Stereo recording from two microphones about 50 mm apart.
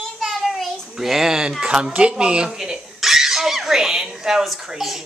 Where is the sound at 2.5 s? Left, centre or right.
Centre.